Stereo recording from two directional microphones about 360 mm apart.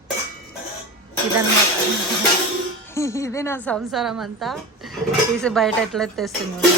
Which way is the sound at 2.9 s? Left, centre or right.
Centre.